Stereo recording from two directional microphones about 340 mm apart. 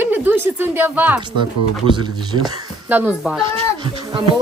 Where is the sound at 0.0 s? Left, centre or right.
Centre.